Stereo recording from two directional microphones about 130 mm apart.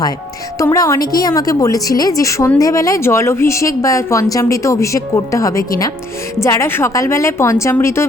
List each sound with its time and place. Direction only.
0.6 s a woman's voice: 25° left (ahead or behind)